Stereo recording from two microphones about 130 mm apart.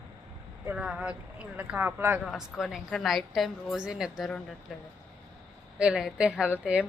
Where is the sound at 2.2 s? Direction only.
Centre (ahead or behind).